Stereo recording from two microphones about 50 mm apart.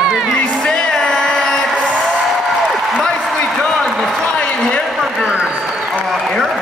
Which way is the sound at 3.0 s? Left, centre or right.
Centre.